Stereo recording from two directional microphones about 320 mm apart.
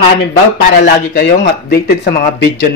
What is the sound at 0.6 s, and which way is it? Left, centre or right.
Speech, left.